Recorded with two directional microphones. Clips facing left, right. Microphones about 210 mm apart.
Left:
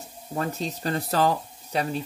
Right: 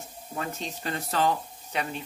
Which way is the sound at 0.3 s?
35° left (ahead or behind).